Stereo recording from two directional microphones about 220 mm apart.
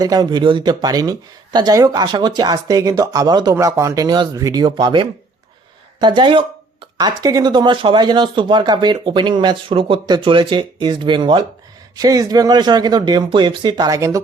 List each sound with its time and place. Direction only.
0.0 s speech: 15° right (ahead or behind)